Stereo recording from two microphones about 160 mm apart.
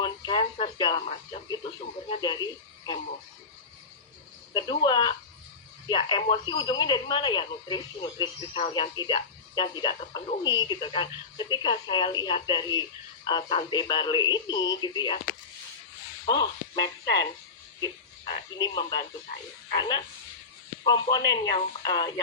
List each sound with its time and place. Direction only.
0.0 s speech: 30° left (ahead or behind)
4.5 s speech: 30° left (ahead or behind)
16.2 s speech: 25° left (ahead or behind)